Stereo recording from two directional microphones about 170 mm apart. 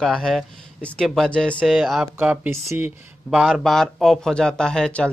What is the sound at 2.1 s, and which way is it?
Speech, 10° right (ahead or behind).